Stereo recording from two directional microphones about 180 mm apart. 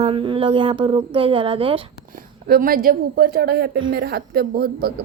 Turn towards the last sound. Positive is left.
turn(degrees=-60)  # may be behind; listen again after turning